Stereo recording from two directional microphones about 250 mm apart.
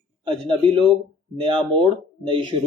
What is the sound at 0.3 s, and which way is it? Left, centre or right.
A man's voice, centre.